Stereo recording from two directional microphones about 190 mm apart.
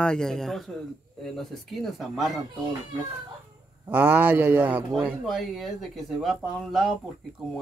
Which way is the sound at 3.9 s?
10° right (ahead or behind).